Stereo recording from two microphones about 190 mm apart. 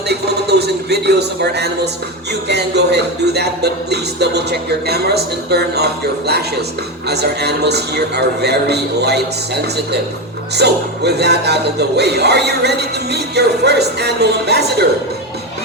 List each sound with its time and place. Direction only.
0.1 s a sound: 60° right (ahead or behind)
2.5 s speech: 60° right (ahead or behind)
10.6 s speech: 60° right (ahead or behind)